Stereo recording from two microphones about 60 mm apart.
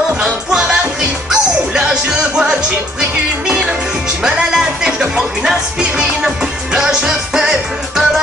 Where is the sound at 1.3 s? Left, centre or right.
Centre.